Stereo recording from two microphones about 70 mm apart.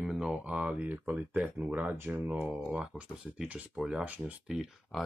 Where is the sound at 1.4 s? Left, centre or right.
Centre.